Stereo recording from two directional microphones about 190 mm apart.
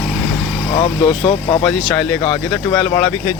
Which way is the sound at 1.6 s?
5° left (ahead or behind).